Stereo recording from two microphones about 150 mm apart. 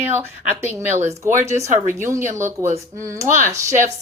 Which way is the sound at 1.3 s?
55° right (ahead or behind).